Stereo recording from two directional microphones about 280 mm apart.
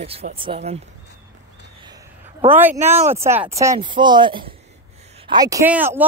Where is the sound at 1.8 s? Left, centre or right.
Centre.